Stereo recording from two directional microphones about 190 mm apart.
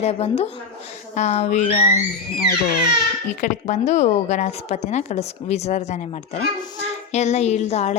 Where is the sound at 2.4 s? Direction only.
55° left (ahead or behind).